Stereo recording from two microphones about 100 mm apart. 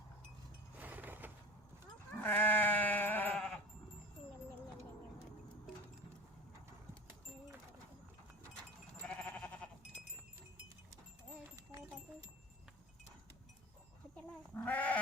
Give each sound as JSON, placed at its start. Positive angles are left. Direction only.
{"t": 0.8, "sound": "wind chime", "side_deg": -15}
{"t": 2.1, "sound": "sheep", "side_deg": 20}
{"t": 3.3, "sound": "sheep", "side_deg": 10}
{"t": 4.2, "sound": "a sound", "side_deg": 90}
{"t": 9.0, "sound": "sheep", "side_deg": 15}
{"t": 14.2, "sound": "sheep", "side_deg": 15}